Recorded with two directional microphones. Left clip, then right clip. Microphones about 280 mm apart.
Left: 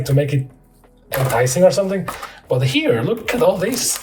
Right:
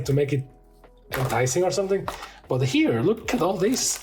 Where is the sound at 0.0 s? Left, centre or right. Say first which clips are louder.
Left 4 dB; right.